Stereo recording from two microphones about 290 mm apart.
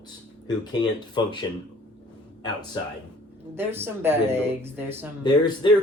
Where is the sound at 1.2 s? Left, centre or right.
Centre.